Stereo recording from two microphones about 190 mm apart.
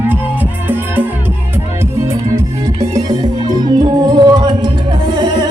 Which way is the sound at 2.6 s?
15° right (ahead or behind).